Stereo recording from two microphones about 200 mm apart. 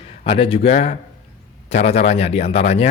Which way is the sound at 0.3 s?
30° left (ahead or behind).